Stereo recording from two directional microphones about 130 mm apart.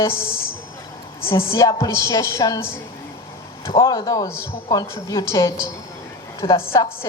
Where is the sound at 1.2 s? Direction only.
20° left (ahead or behind).